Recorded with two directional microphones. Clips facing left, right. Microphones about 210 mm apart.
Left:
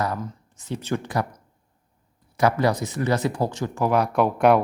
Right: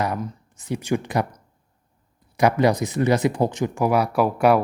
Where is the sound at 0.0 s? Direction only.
15° right (ahead or behind).